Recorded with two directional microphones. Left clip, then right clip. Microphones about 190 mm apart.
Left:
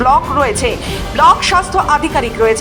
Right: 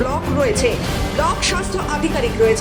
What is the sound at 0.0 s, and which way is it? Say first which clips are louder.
Speech: left 8 dB; 15° left (ahead or behind).